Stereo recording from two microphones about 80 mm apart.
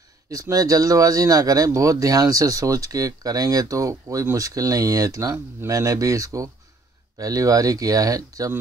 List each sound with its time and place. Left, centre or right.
0.3 s speech: right